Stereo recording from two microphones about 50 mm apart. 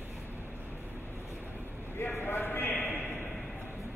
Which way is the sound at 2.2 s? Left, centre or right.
Left.